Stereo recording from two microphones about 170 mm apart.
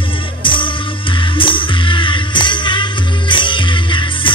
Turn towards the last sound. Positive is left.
turn(degrees=30)  # may be behind; listen again after turning